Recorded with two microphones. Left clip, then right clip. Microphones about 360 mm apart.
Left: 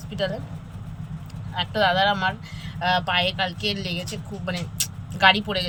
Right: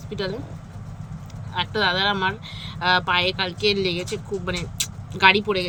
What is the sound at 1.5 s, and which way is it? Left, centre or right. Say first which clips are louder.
A woman's voice: left 1 dB; centre.